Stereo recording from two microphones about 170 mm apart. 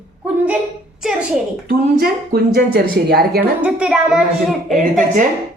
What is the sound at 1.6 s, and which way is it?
Speech, 65° right (ahead or behind).